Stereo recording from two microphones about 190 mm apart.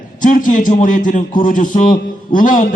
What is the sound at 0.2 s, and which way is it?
A man's voice, 45° left (ahead or behind).